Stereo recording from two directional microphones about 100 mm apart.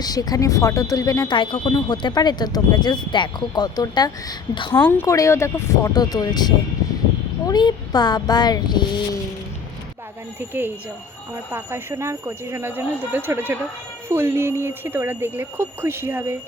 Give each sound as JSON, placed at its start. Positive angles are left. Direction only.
{"t": 0.0, "sound": "speech", "side_deg": 40}
{"t": 1.3, "sound": "speech", "side_deg": 60}
{"t": 4.5, "sound": "a woman's voice", "side_deg": 55}
{"t": 4.8, "sound": "speech", "side_deg": 20}
{"t": 5.0, "sound": "speech", "side_deg": 30}
{"t": 5.9, "sound": "speech", "side_deg": 40}
{"t": 11.5, "sound": "speech", "side_deg": -25}